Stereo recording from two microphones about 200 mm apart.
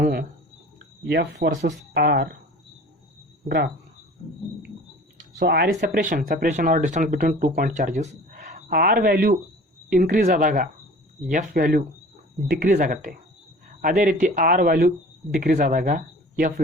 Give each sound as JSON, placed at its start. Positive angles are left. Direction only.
{"t": 0.0, "sound": "cricket", "side_deg": -50}
{"t": 1.0, "sound": "speech", "side_deg": -55}
{"t": 5.1, "sound": "speech", "side_deg": -55}